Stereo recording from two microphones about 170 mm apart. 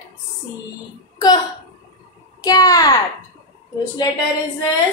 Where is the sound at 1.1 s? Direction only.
25° left (ahead or behind).